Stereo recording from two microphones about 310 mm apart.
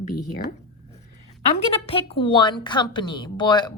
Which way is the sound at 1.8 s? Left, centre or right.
Centre.